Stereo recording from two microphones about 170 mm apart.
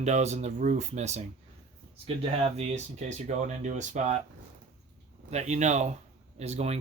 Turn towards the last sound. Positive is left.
turn(degrees=-40)  # may be behind; listen again after turning